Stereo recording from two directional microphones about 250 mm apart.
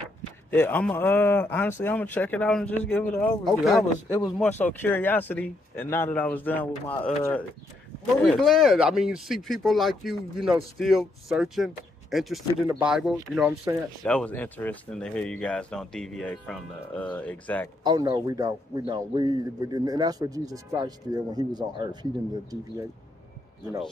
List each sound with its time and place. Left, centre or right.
0.5 s speech: centre
14.0 s speech: centre
17.8 s a man's voice: centre